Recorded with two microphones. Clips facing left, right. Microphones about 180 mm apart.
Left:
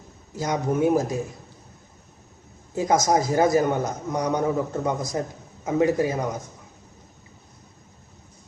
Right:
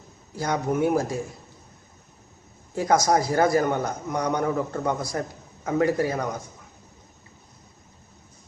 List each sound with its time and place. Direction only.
0.3 s a man's voice: 20° left (ahead or behind)
2.7 s a man's voice: 20° left (ahead or behind)